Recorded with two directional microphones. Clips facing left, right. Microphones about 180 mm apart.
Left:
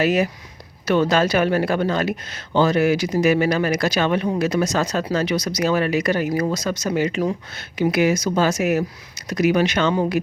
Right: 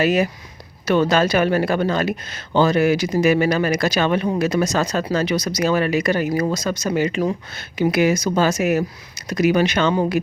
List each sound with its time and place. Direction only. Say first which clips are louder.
0.0 s speech: right 1 dB; 45° right (ahead or behind)